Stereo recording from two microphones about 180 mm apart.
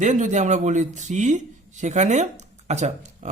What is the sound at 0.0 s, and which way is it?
Speech, 40° right (ahead or behind).